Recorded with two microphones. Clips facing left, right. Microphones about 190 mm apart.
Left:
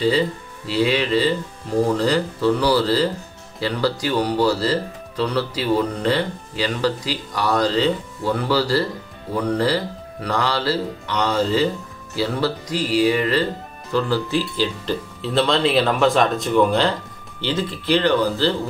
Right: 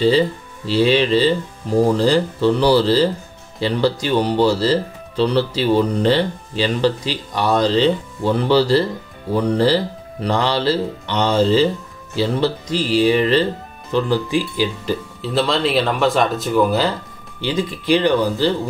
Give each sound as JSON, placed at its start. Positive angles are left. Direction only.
{"t": 0.7, "sound": "speech", "side_deg": -30}
{"t": 15.2, "sound": "speech", "side_deg": 0}